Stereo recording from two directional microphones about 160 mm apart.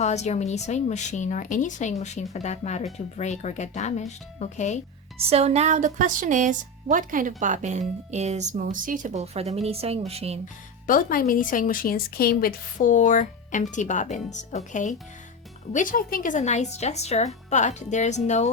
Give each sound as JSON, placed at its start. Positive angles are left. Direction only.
{"t": 0.0, "sound": "a woman's voice", "side_deg": 45}
{"t": 5.3, "sound": "a woman's voice", "side_deg": -40}
{"t": 10.8, "sound": "a woman's voice", "side_deg": 60}